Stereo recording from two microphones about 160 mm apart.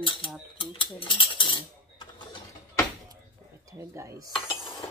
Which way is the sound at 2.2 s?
25° left (ahead or behind).